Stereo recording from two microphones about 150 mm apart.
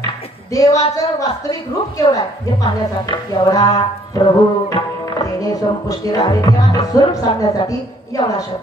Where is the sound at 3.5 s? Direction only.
30° left (ahead or behind).